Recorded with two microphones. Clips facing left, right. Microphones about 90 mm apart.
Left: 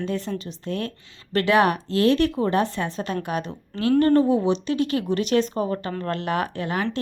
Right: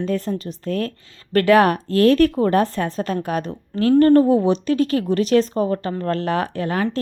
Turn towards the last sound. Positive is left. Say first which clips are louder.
# right 3 dB
turn(degrees=-40)  # may be behind; listen again after turning